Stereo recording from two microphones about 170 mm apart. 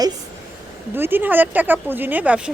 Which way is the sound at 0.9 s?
10° right (ahead or behind).